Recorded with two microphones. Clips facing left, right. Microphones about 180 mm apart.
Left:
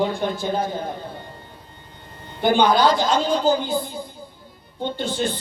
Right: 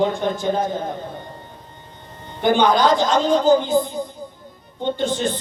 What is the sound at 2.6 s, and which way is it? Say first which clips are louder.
A man's voice: right 1 dB; 20° right (ahead or behind).